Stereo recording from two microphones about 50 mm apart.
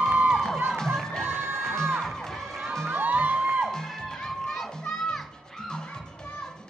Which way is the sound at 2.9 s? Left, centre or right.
Right.